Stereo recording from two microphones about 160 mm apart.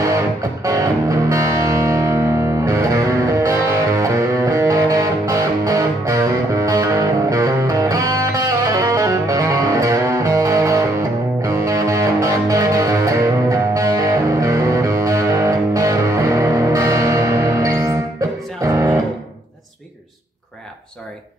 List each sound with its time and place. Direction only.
0.0 s music: 20° right (ahead or behind)